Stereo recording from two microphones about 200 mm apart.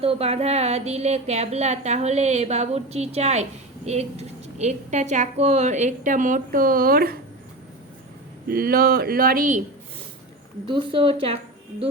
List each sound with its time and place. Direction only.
0.0 s a woman's voice: 30° right (ahead or behind); by 7.2 s 50° right (ahead or behind)
8.4 s speech: 50° right (ahead or behind)
10.7 s speech: 25° right (ahead or behind)